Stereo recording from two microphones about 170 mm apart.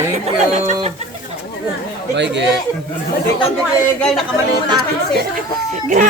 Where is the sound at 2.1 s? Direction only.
90° right.